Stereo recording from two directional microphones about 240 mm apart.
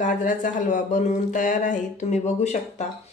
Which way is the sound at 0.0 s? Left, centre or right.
Left.